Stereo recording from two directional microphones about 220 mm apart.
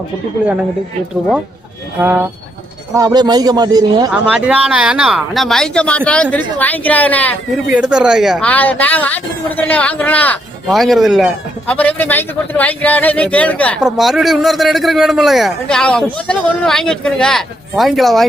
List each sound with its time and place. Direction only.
2.0 s a man's voice: 10° right (ahead or behind)
4.1 s a woman's voice: 5° right (ahead or behind)
7.8 s speech: 5° right (ahead or behind)